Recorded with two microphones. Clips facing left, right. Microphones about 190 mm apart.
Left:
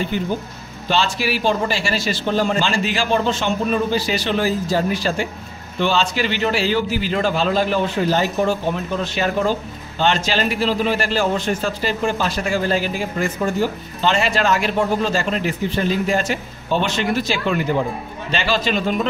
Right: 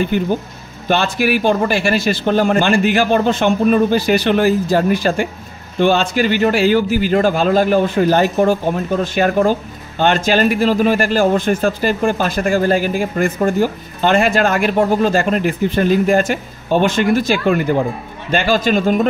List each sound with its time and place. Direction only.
0.8 s a man's voice: 55° right (ahead or behind)